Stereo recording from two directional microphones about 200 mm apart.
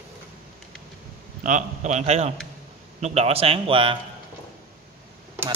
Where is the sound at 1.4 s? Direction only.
40° right (ahead or behind).